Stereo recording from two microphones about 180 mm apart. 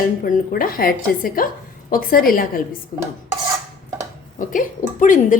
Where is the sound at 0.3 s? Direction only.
55° left (ahead or behind).